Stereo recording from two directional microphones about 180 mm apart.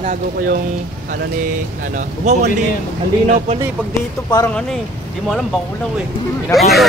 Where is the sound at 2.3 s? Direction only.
40° right (ahead or behind).